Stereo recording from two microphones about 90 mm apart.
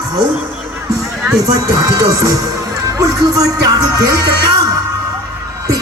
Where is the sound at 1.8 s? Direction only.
40° right (ahead or behind).